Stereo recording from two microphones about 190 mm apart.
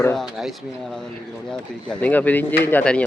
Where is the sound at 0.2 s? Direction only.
Centre (ahead or behind).